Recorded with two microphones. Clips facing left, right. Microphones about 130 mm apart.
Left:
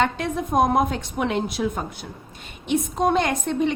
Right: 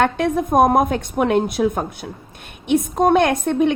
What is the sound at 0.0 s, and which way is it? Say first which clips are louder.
A woman's voice: right 5 dB; 55° right (ahead or behind).